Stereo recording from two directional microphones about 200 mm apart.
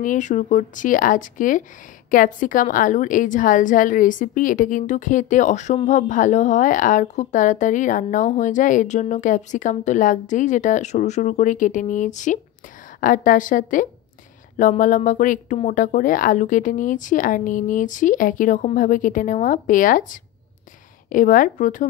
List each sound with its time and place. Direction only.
0.0 s a woman's voice: 40° left (ahead or behind)